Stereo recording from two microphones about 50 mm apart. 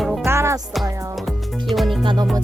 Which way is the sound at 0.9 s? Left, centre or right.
Right.